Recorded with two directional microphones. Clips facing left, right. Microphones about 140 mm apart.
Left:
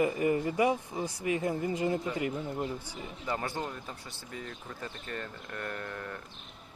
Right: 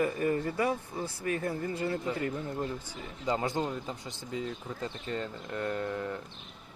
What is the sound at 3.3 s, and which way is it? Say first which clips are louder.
Speech: right 4 dB; 20° right (ahead or behind).